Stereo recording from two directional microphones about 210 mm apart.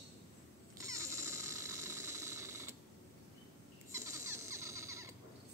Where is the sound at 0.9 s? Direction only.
15° right (ahead or behind).